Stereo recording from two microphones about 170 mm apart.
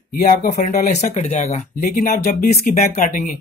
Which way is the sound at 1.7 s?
60° left (ahead or behind).